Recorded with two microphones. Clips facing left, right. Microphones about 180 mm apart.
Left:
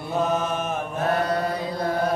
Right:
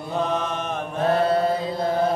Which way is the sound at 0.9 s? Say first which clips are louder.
Right 4 dB; 30° right (ahead or behind).